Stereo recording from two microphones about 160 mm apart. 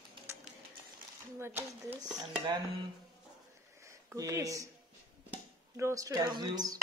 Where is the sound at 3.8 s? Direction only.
20° right (ahead or behind).